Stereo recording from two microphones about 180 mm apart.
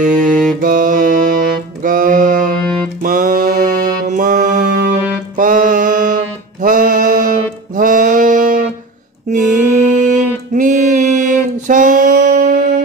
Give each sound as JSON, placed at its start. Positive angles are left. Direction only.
{"t": 0.0, "sound": "music", "side_deg": -45}
{"t": 5.4, "sound": "mantra", "side_deg": -45}
{"t": 10.5, "sound": "a sound", "side_deg": -45}